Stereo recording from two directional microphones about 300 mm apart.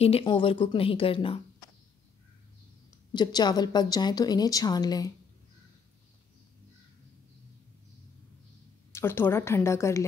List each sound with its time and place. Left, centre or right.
0.0 s a woman's voice: centre
3.1 s a woman's voice: centre
8.9 s a woman's voice: centre